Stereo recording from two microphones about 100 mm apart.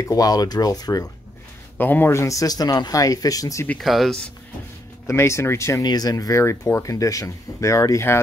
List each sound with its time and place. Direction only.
0.0 s speech: 35° left (ahead or behind)
1.8 s speech: 20° left (ahead or behind); by 3.6 s 35° left (ahead or behind)
3.8 s speech: centre (ahead or behind)
5.0 s speech: 25° left (ahead or behind)
5.8 s speech: 40° left (ahead or behind)